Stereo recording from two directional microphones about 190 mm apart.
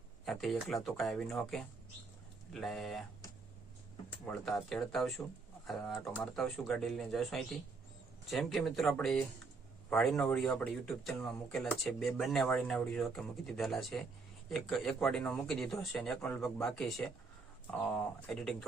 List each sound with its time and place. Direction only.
0.3 s speech: centre (ahead or behind)
4.3 s speech: centre (ahead or behind)
18.3 s speech: centre (ahead or behind)